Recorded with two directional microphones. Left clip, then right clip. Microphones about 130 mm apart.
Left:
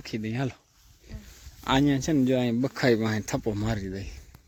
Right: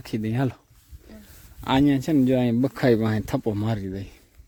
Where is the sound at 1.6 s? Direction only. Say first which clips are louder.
Right 3 dB; 15° right (ahead or behind).